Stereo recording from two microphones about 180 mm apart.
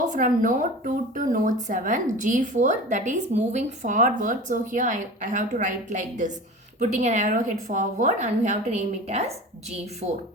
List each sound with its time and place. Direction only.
0.1 s a woman's voice: 45° right (ahead or behind)